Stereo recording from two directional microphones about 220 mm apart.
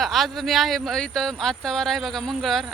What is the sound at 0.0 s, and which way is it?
Speech, centre (ahead or behind).